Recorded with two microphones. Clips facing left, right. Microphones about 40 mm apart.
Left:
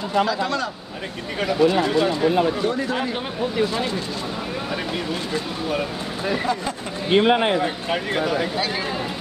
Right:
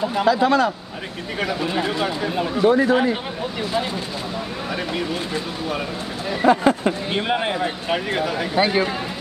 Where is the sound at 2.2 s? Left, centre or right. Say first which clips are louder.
Left 4 dB; centre.